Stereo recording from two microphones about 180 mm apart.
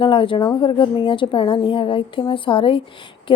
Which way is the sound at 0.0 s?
30° left (ahead or behind).